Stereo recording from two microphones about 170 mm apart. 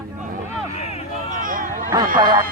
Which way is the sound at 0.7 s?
40° left (ahead or behind).